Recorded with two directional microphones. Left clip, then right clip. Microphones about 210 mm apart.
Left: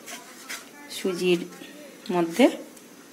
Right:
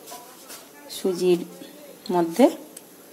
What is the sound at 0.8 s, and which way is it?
Speech, 15° right (ahead or behind).